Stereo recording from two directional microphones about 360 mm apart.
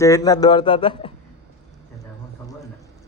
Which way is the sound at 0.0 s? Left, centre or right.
Centre.